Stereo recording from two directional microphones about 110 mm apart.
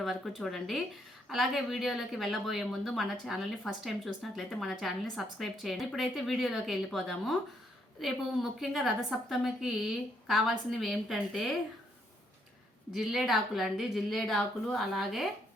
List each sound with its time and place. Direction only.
0.0 s a woman's voice: centre (ahead or behind)
12.9 s a woman's voice: 5° right (ahead or behind)